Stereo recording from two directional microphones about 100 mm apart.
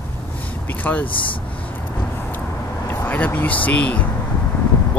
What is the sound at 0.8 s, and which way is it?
Speech, 15° left (ahead or behind).